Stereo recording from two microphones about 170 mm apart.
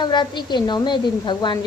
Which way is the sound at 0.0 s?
25° left (ahead or behind).